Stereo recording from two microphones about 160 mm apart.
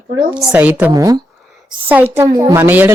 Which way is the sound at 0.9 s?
20° right (ahead or behind).